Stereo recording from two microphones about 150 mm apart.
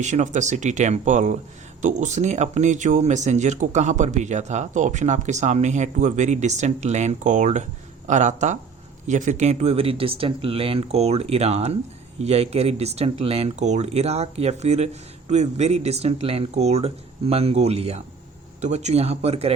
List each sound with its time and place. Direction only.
0.0 s speech: 55° right (ahead or behind)